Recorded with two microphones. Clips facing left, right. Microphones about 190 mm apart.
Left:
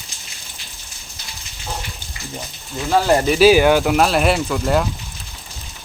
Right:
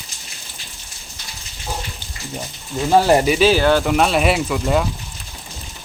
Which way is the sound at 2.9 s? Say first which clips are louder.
Right 2 dB; 15° right (ahead or behind).